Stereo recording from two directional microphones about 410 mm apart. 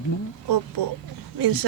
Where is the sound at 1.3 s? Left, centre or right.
Right.